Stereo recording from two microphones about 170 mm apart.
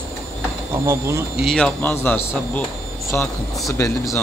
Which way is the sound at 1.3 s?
Centre (ahead or behind).